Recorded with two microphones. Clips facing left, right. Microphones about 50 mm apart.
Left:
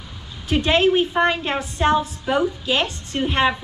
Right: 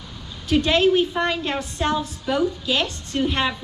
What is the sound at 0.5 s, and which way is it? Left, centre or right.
A woman's voice, left.